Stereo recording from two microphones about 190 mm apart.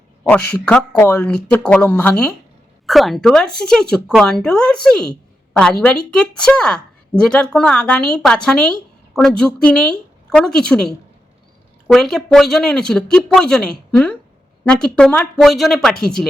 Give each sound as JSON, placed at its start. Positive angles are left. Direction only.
{"t": 0.3, "sound": "a woman's voice", "side_deg": 10}